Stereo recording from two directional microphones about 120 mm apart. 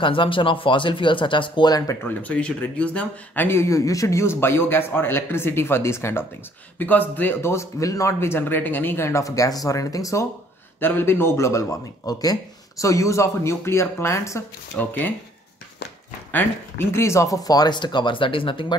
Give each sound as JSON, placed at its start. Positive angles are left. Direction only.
{"t": 0.0, "sound": "speech", "side_deg": 45}
{"t": 2.0, "sound": "speech", "side_deg": 10}
{"t": 10.8, "sound": "speech", "side_deg": 15}
{"t": 16.3, "sound": "speech", "side_deg": 15}